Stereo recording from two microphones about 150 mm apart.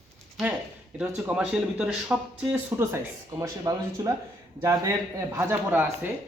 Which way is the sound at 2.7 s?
20° right (ahead or behind).